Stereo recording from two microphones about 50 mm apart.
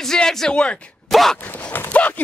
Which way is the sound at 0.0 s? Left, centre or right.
Centre.